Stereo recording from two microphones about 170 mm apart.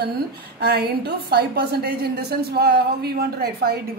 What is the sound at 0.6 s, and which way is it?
A woman's voice, 70° right (ahead or behind).